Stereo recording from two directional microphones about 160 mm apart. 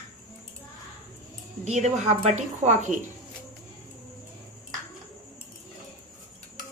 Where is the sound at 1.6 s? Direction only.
45° right (ahead or behind).